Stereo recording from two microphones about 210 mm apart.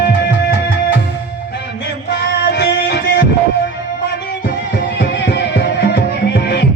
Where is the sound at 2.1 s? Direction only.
55° left (ahead or behind).